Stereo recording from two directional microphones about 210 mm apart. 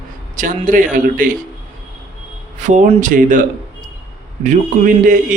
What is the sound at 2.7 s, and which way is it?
Speech, 40° right (ahead or behind).